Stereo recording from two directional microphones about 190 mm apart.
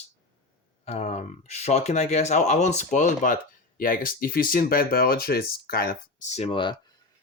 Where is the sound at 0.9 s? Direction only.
35° left (ahead or behind).